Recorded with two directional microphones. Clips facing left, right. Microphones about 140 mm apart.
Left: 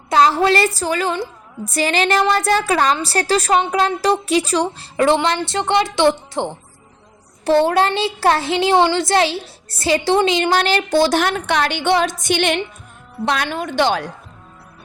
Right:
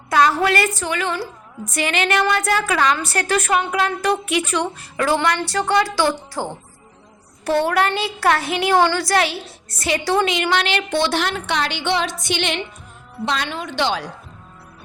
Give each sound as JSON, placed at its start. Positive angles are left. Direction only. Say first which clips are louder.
{"t": 0.1, "sound": "a woman's voice", "louder": "left 3 dB", "side_deg": 25}